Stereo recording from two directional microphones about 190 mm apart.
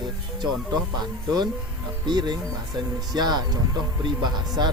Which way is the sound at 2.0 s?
25° right (ahead or behind).